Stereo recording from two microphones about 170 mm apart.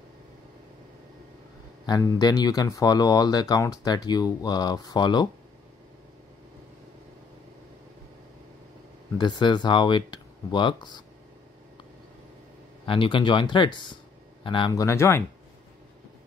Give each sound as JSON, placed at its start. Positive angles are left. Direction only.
{"t": 1.9, "sound": "speech", "side_deg": 20}
{"t": 9.2, "sound": "speech", "side_deg": 25}
{"t": 12.8, "sound": "speech", "side_deg": 30}